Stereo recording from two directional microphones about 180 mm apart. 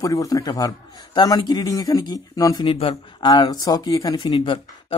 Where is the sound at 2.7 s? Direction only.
30° left (ahead or behind).